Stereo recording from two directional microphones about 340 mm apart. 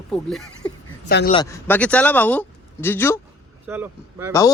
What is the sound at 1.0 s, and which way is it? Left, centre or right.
Speech, left.